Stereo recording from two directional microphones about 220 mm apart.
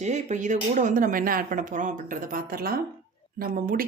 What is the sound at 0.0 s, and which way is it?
A woman's voice, 30° right (ahead or behind).